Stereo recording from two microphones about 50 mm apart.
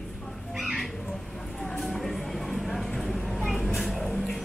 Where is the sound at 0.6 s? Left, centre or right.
Centre.